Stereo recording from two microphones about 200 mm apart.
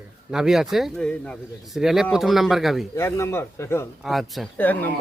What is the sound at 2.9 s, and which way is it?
Speech, 15° left (ahead or behind).